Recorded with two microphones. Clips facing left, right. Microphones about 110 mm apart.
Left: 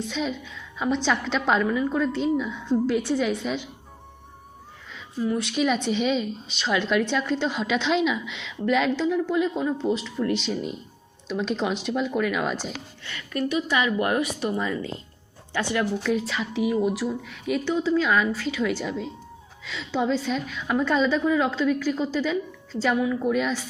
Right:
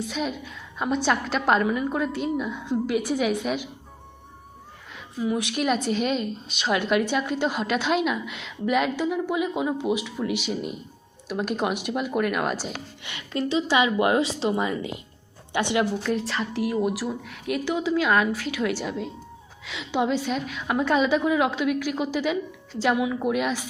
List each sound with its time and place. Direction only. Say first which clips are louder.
0.0 s a woman's voice: even; 5° right (ahead or behind)
4.9 s a sound: even; 10° right (ahead or behind)
5.5 s a woman's voice: left 2 dB; 5° right (ahead or behind)
13.0 s speech: right 1 dB; 20° right (ahead or behind)
13.4 s a woman's voice: right 2 dB; 30° right (ahead or behind)
16.0 s a woman's voice: left 1 dB; centre (ahead or behind)